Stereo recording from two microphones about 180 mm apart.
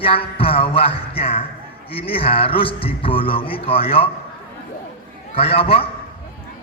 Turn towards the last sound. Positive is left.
turn(degrees=30)  # may be behind; listen again after turning